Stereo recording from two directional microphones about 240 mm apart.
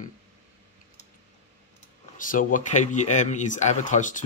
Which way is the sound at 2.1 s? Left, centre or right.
Left.